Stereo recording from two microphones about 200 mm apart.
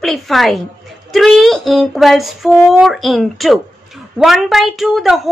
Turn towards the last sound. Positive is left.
turn(degrees=0)  # may be behind; listen again after turning